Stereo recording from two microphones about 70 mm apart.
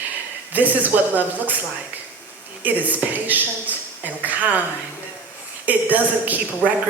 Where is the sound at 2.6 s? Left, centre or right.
Right.